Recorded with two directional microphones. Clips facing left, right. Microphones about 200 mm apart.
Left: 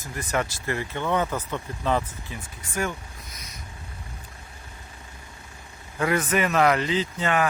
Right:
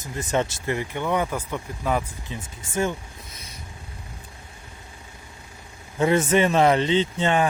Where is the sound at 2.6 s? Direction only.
25° right (ahead or behind).